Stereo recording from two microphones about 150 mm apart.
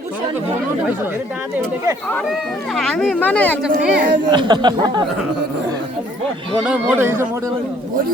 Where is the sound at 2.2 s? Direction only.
Centre (ahead or behind).